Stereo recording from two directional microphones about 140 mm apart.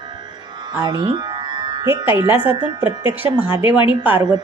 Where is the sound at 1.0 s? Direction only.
30° right (ahead or behind).